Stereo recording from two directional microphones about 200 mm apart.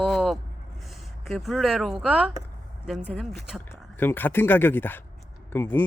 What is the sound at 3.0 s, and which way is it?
Speech, 10° left (ahead or behind).